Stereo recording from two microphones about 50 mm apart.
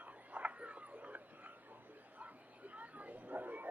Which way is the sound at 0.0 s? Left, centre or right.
Right.